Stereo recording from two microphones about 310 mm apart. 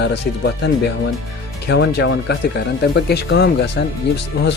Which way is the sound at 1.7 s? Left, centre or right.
Left.